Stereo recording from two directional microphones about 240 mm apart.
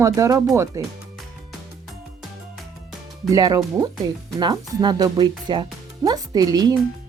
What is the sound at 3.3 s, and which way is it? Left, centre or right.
Speech, centre.